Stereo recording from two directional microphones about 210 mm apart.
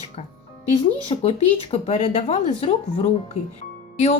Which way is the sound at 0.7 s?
30° left (ahead or behind).